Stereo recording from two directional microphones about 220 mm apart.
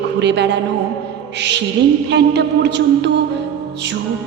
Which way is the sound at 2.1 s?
50° right (ahead or behind).